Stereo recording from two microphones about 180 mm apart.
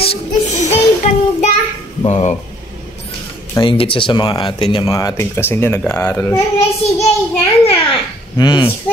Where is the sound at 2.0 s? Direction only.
35° left (ahead or behind).